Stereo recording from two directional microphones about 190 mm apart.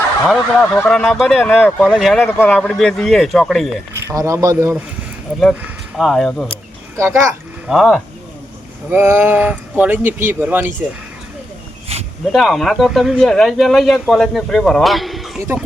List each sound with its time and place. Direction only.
0.3 s speech: 5° left (ahead or behind)
3.9 s speech: 15° right (ahead or behind)
6.0 s speech: centre (ahead or behind)
6.5 s a sound: 15° right (ahead or behind)
7.7 s speech: centre (ahead or behind)
12.3 s speech: centre (ahead or behind)